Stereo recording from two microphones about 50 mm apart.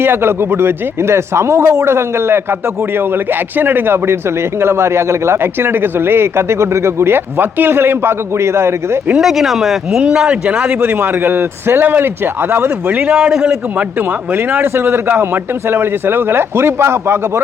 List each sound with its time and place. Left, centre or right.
0.0 s speech: right
3.6 s a man's voice: right
9.1 s speech: centre
10.0 s speech: centre
10.8 s a man's voice: right
12.9 s a man's voice: right
14.3 s a man's voice: right